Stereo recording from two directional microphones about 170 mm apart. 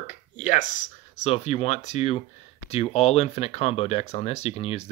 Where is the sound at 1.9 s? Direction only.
40° left (ahead or behind).